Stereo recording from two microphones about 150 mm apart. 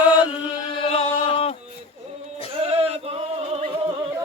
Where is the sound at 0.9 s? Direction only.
40° left (ahead or behind).